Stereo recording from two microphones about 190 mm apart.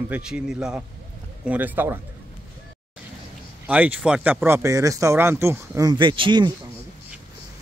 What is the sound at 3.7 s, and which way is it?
Speech, 10° right (ahead or behind).